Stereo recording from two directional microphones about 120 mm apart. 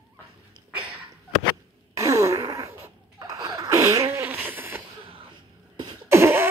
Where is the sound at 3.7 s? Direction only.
25° right (ahead or behind).